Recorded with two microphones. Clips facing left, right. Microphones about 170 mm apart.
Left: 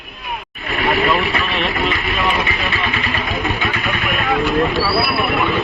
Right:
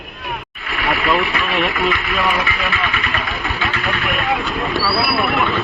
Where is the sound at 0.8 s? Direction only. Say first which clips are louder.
Left 1 dB; 25° left (ahead or behind).